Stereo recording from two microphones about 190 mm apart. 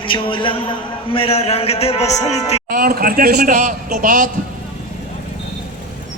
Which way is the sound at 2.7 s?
50° right (ahead or behind).